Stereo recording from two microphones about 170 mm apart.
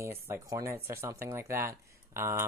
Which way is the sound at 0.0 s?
15° right (ahead or behind).